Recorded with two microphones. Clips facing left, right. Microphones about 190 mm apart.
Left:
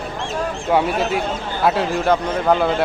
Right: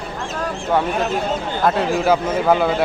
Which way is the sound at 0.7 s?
10° left (ahead or behind).